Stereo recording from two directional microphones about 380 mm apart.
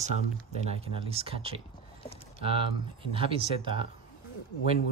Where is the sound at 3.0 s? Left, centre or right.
Centre.